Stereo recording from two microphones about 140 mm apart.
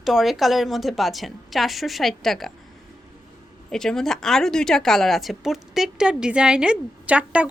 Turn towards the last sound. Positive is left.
turn(degrees=-10)  # may be behind; listen again after turning